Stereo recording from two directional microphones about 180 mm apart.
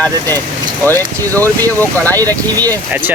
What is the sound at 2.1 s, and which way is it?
Speech, 20° right (ahead or behind).